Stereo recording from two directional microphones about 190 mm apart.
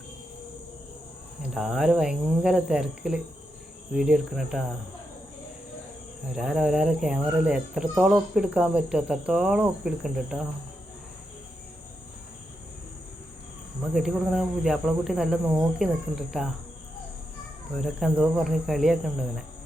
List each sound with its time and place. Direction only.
1.4 s speech: centre (ahead or behind)
6.3 s speech: 5° right (ahead or behind)
13.9 s speech: centre (ahead or behind)
17.7 s speech: centre (ahead or behind)